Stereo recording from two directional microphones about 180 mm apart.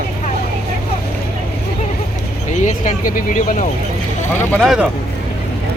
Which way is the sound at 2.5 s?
40° left (ahead or behind).